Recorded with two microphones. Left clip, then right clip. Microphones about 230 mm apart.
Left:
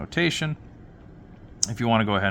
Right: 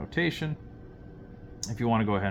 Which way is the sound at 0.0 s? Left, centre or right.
Left.